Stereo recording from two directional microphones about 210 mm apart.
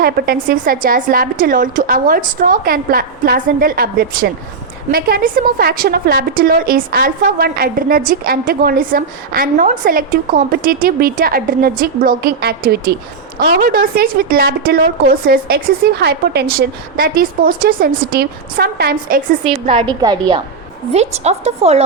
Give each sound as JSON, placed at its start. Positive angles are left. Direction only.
{"t": 0.0, "sound": "a woman's voice", "side_deg": -45}
{"t": 19.5, "sound": "a woman's voice", "side_deg": -25}
{"t": 20.9, "sound": "a woman's voice", "side_deg": -30}